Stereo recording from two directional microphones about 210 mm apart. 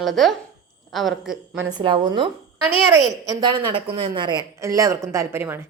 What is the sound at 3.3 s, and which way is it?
Speech, 20° right (ahead or behind).